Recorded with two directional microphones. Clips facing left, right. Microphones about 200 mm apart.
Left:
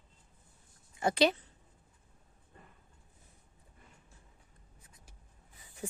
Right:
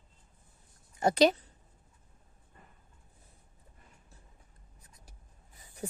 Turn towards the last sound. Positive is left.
turn(degrees=-40)  # may be behind; listen again after turning